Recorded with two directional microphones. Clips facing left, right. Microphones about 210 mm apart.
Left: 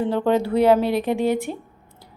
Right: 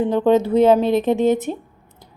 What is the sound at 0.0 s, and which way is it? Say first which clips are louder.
A woman's voice: right 4 dB; 20° right (ahead or behind).